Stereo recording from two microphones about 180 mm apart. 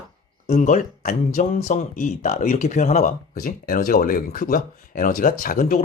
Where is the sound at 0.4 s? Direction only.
40° left (ahead or behind).